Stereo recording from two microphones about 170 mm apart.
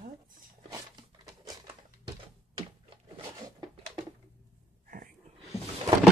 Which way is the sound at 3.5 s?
25° right (ahead or behind).